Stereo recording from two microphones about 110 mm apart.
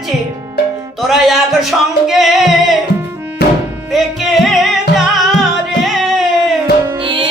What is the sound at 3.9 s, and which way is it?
Music, centre (ahead or behind).